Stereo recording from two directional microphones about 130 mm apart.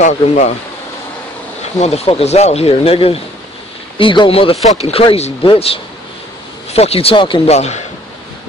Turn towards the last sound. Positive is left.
turn(degrees=55)  # may be behind; listen again after turning